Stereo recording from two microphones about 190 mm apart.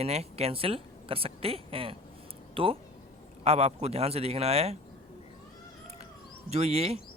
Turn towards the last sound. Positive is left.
turn(degrees=-35)  # may be behind; listen again after turning